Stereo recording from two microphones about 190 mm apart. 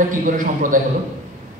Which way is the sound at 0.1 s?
45° right (ahead or behind).